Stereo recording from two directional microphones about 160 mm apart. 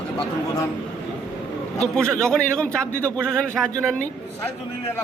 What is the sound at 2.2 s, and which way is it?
A man's voice, 5° left (ahead or behind).